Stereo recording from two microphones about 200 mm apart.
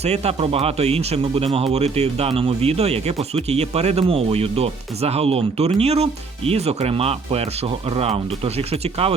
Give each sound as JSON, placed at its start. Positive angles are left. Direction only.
{"t": 0.0, "sound": "speech", "side_deg": -30}